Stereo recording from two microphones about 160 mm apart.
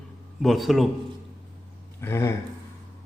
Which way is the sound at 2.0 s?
15° left (ahead or behind).